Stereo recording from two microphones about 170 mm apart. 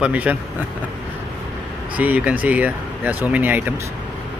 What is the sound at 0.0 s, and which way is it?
Speech, 10° right (ahead or behind).